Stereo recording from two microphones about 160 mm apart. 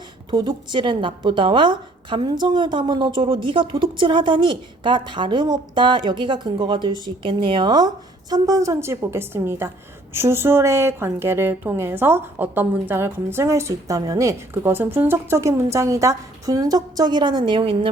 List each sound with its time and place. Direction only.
0.3 s a woman's voice: 30° right (ahead or behind)